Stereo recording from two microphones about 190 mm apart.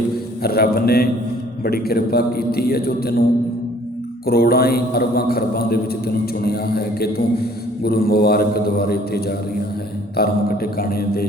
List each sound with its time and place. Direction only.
0.4 s a man's voice: 55° left (ahead or behind)
4.3 s a man's voice: 55° left (ahead or behind)